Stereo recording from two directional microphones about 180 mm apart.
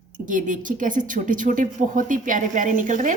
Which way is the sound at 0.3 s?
45° right (ahead or behind).